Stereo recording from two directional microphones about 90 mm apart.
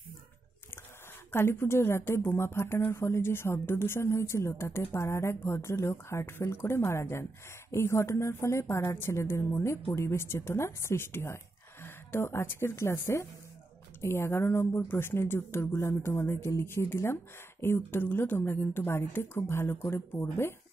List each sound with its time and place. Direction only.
1.3 s speech: 25° left (ahead or behind)